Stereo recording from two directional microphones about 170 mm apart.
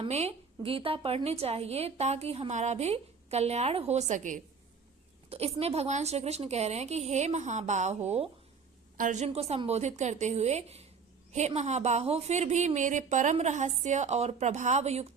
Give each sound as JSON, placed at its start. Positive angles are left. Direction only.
{"t": 0.0, "sound": "a woman's voice", "side_deg": -40}
{"t": 5.3, "sound": "a woman's voice", "side_deg": -35}